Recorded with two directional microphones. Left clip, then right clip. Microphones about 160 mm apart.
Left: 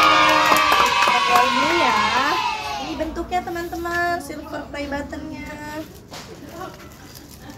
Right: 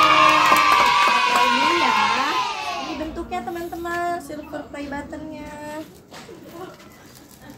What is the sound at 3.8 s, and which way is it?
Speech, centre (ahead or behind).